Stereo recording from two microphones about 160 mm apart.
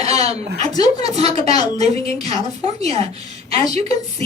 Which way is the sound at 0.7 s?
25° left (ahead or behind).